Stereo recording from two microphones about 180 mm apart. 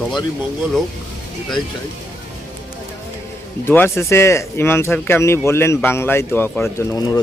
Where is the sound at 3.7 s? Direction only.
15° left (ahead or behind).